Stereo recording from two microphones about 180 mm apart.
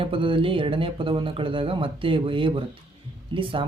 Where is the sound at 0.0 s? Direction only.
30° right (ahead or behind).